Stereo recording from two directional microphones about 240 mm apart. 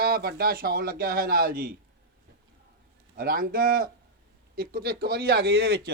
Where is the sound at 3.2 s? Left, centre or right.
Right.